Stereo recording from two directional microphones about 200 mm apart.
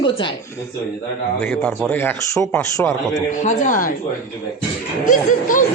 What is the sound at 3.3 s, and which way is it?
Speech, 40° left (ahead or behind).